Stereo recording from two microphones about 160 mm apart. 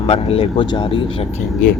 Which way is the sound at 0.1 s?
35° left (ahead or behind).